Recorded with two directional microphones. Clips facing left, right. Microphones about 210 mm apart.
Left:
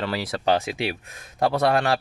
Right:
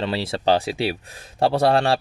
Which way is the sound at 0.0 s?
25° right (ahead or behind).